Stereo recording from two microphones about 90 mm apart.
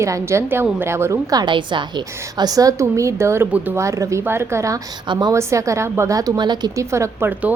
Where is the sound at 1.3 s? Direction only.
60° right (ahead or behind); by 3.4 s 30° right (ahead or behind).